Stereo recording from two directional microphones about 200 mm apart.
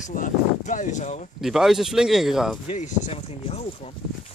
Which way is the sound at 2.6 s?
35° left (ahead or behind).